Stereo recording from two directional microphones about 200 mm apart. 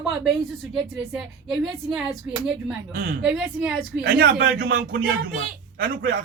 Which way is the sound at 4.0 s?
55° right (ahead or behind).